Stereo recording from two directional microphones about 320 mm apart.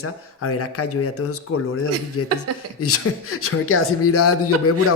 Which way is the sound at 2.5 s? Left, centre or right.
Right.